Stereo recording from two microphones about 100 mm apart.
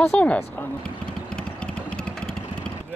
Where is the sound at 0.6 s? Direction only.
10° left (ahead or behind).